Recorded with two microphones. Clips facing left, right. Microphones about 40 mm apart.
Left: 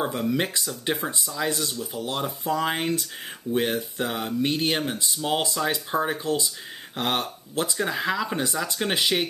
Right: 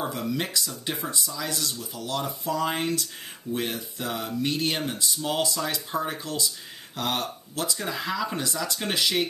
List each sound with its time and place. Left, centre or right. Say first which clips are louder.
0.0 s speech: left 4 dB; left